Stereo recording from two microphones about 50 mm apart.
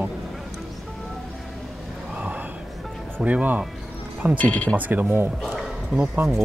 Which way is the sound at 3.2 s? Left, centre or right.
Right.